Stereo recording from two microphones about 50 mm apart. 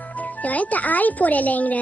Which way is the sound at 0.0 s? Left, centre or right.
Left.